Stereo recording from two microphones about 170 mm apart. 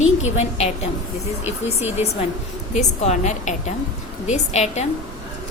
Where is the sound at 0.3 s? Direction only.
40° left (ahead or behind).